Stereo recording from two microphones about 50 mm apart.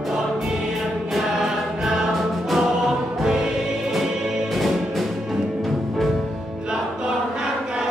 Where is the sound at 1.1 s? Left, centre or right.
Centre.